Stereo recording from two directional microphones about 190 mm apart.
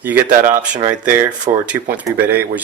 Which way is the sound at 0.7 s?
40° right (ahead or behind).